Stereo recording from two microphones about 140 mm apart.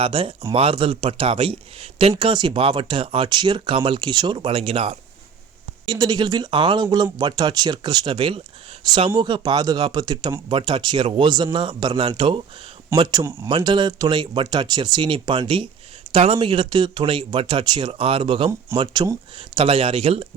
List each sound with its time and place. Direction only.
0.0 s speech: 40° right (ahead or behind)
5.8 s speech: 30° right (ahead or behind)